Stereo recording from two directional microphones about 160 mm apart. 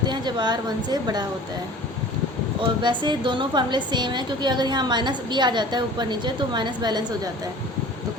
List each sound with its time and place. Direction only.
0.0 s a woman's voice: 30° right (ahead or behind)
2.6 s a woman's voice: 30° right (ahead or behind)